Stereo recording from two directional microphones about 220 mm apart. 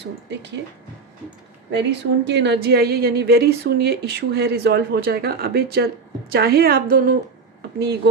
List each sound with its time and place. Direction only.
0.0 s a woman's voice: 55° right (ahead or behind)
1.7 s a woman's voice: 50° right (ahead or behind)